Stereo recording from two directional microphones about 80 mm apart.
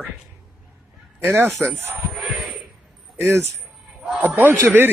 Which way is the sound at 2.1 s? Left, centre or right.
Centre.